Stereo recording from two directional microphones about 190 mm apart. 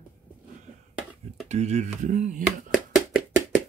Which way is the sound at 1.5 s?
35° right (ahead or behind).